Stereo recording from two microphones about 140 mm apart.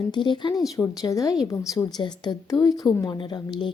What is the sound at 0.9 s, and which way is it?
A woman's voice, 25° left (ahead or behind).